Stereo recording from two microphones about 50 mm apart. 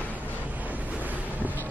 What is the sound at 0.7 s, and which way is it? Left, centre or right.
Waves, right.